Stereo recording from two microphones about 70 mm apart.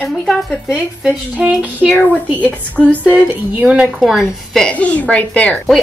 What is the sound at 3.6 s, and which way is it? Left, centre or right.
Speech, centre.